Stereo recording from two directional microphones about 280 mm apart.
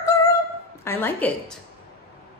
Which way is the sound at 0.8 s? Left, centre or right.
Centre.